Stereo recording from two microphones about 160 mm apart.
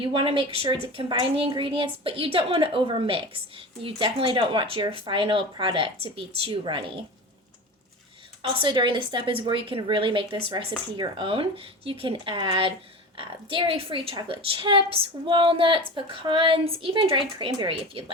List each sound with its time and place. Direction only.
0.0 s a woman's voice: 35° right (ahead or behind)
8.4 s a woman's voice: 30° right (ahead or behind)